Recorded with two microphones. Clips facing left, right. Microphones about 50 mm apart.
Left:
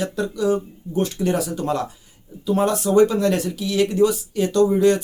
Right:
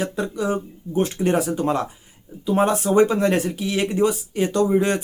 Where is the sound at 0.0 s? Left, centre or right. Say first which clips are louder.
Left 2 dB; right.